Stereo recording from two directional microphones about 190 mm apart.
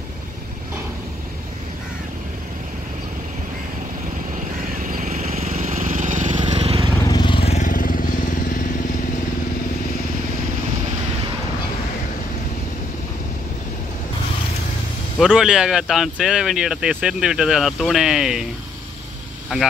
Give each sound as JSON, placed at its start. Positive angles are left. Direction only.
{"t": 4.8, "sound": "vehicle", "side_deg": -40}
{"t": 7.1, "sound": "vehicle", "side_deg": 25}
{"t": 15.1, "sound": "speech", "side_deg": -5}